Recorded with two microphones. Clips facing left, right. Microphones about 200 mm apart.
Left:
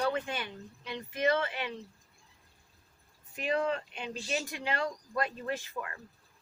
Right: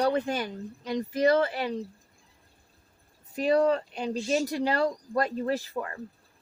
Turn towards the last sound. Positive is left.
turn(degrees=-35)  # may be behind; listen again after turning